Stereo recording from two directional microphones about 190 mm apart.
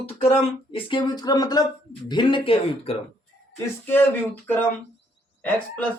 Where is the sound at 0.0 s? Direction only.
30° left (ahead or behind).